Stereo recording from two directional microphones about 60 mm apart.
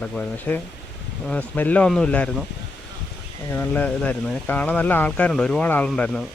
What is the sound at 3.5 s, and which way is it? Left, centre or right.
Speech, left.